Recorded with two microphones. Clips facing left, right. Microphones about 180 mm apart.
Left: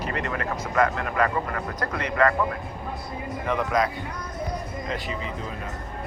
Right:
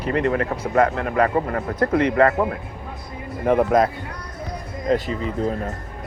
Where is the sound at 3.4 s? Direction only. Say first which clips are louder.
Right 8 dB; 50° right (ahead or behind).